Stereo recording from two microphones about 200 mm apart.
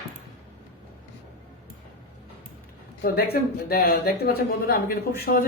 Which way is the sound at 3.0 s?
50° left (ahead or behind).